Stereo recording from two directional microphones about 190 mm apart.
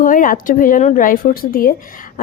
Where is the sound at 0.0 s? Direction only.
45° left (ahead or behind).